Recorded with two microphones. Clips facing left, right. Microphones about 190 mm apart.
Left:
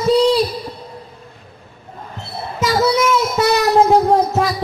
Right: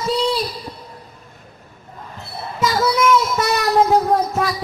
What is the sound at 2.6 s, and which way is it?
Music, 30° left (ahead or behind).